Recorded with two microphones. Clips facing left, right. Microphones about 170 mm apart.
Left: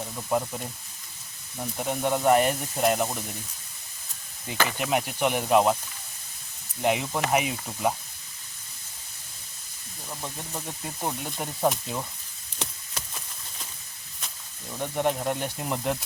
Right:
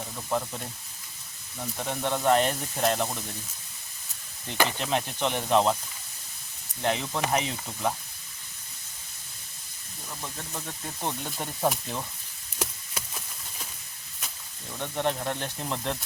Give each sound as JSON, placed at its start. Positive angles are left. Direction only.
{"t": 0.3, "sound": "speech", "side_deg": 10}
{"t": 1.8, "sound": "speech", "side_deg": 10}
{"t": 4.8, "sound": "speech", "side_deg": 10}
{"t": 6.8, "sound": "speech", "side_deg": 10}
{"t": 10.2, "sound": "speech", "side_deg": 15}
{"t": 11.0, "sound": "speech", "side_deg": 5}
{"t": 12.5, "sound": "chop", "side_deg": -5}
{"t": 14.8, "sound": "speech", "side_deg": 10}